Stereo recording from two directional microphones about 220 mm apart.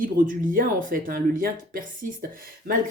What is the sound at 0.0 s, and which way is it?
Speech, 40° right (ahead or behind).